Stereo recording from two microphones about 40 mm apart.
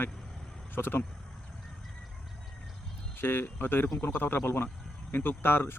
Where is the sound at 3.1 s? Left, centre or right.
Left.